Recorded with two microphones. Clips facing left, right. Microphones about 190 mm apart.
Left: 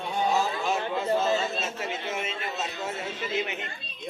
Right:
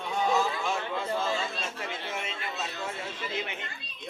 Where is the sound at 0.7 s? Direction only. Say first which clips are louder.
Left 5 dB; 25° left (ahead or behind).